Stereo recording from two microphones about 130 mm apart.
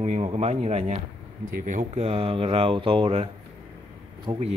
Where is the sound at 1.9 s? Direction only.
50° right (ahead or behind).